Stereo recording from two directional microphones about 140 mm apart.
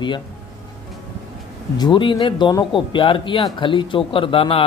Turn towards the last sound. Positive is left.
turn(degrees=40)  # may be behind; listen again after turning